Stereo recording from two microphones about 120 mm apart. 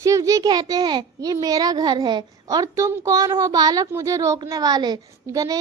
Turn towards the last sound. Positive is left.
turn(degrees=-30)  # may be behind; listen again after turning